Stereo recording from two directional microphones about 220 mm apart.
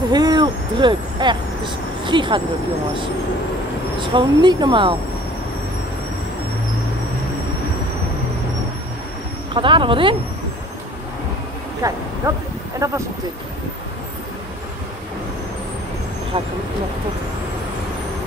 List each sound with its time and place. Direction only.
0.1 s speech: 20° right (ahead or behind)
4.0 s speech: 20° right (ahead or behind)
9.5 s speech: 20° right (ahead or behind)
11.8 s speech: 15° right (ahead or behind)